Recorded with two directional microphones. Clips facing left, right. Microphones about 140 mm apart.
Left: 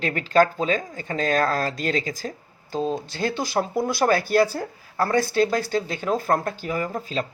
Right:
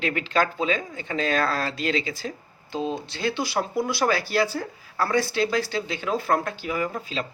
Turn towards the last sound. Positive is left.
turn(degrees=45)  # may be behind; listen again after turning